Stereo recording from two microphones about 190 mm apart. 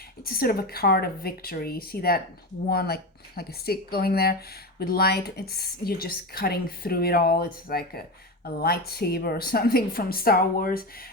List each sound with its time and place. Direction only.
0.3 s speech: 50° left (ahead or behind)